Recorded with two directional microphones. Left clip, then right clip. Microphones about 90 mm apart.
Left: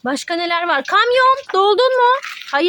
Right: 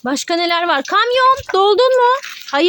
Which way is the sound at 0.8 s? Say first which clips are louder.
Even; centre (ahead or behind).